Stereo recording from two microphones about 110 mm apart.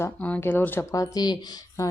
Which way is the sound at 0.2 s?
15° left (ahead or behind).